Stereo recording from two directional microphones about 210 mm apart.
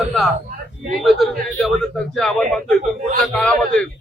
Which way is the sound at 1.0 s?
Centre (ahead or behind).